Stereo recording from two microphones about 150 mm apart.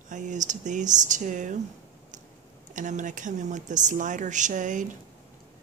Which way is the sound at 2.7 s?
55° right (ahead or behind).